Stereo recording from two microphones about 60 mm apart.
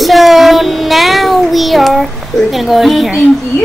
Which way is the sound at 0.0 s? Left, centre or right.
Centre.